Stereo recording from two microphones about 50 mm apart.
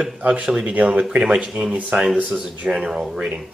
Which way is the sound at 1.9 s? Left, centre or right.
Right.